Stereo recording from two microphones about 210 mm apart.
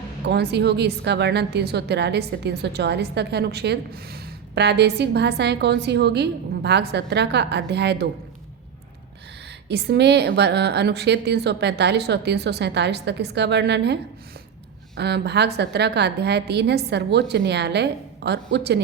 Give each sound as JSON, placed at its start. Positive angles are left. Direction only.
{"t": 0.3, "sound": "a woman's voice", "side_deg": -50}
{"t": 9.6, "sound": "a woman's voice", "side_deg": -50}